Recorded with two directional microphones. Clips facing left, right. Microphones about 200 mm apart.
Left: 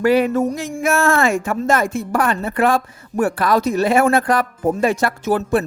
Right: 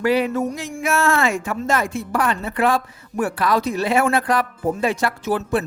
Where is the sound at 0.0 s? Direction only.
50° left (ahead or behind).